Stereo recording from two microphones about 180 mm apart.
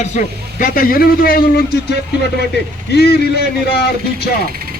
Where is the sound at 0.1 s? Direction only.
45° left (ahead or behind).